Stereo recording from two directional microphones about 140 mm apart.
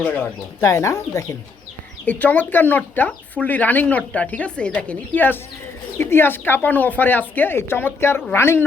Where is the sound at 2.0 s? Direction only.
10° left (ahead or behind).